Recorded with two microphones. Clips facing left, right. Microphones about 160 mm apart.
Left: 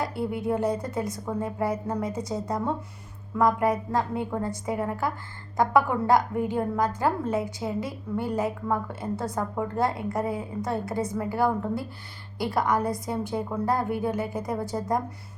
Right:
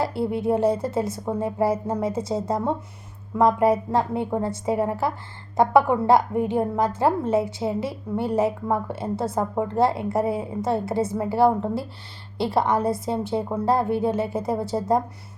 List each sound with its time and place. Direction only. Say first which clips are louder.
0.0 s a woman's voice: right 5 dB; 25° right (ahead or behind)